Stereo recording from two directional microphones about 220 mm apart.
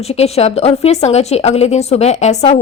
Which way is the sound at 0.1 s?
30° left (ahead or behind).